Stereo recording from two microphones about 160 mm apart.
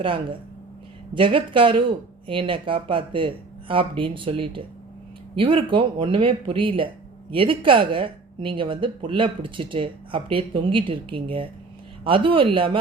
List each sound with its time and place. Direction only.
0.0 s speech: 35° right (ahead or behind)